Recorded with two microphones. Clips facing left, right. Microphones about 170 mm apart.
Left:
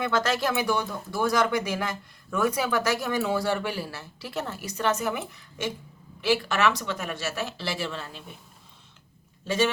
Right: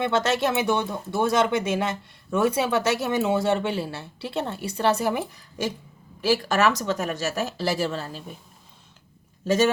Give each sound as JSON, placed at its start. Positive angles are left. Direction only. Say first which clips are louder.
{"t": 0.0, "sound": "speech", "louder": "right 3 dB", "side_deg": -25}
{"t": 9.5, "sound": "speech", "louder": "right 5 dB", "side_deg": -45}